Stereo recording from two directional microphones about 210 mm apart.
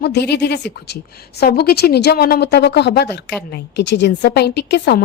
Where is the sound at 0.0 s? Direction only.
50° left (ahead or behind).